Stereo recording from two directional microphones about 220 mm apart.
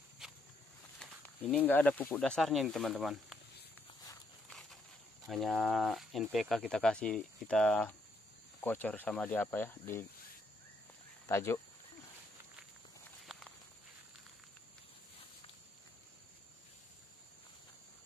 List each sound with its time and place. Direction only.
0.2 s walk: 5° right (ahead or behind)
0.9 s speech: 5° left (ahead or behind)
4.5 s a sound: centre (ahead or behind)
5.2 s speech: centre (ahead or behind)
11.2 s speech: 10° left (ahead or behind)